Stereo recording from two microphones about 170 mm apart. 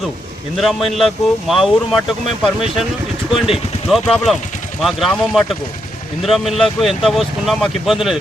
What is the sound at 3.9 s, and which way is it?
Speech, centre (ahead or behind).